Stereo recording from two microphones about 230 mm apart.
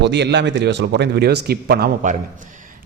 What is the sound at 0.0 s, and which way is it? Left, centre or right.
Speech, right.